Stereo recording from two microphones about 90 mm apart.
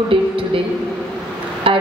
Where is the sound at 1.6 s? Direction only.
85° right.